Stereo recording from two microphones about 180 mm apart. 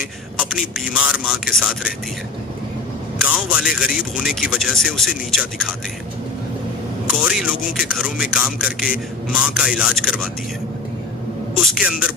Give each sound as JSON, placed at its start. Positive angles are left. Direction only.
{"t": 0.3, "sound": "a man's voice", "side_deg": -5}
{"t": 3.2, "sound": "speech", "side_deg": -5}
{"t": 7.1, "sound": "speech", "side_deg": -5}
{"t": 11.6, "sound": "speech", "side_deg": -5}